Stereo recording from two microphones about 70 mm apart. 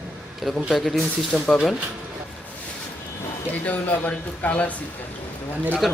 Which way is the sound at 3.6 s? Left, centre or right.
Left.